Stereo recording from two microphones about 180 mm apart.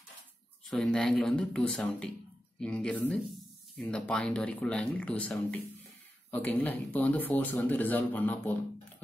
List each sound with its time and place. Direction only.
0.7 s speech: centre (ahead or behind)